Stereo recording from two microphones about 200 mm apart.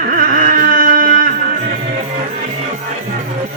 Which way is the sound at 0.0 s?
45° right (ahead or behind).